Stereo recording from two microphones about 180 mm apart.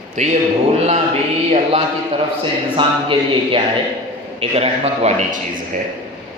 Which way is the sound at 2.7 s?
30° right (ahead or behind).